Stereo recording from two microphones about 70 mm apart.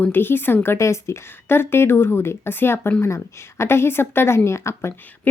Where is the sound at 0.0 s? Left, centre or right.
Left.